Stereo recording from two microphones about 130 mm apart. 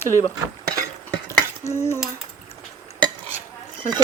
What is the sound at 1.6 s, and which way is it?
Humming, 20° left (ahead or behind).